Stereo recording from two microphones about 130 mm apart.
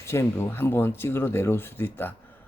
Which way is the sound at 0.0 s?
20° left (ahead or behind).